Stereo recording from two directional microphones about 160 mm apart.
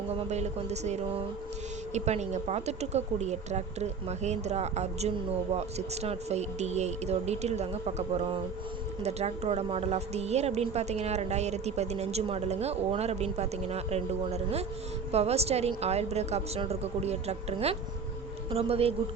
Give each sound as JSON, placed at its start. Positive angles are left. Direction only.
{"t": 0.1, "sound": "a woman's voice", "side_deg": -45}